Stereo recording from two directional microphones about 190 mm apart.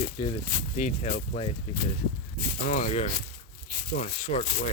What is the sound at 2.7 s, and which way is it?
Speech, 40° left (ahead or behind).